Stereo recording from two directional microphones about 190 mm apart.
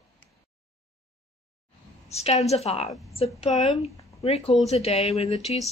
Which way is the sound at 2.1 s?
35° left (ahead or behind).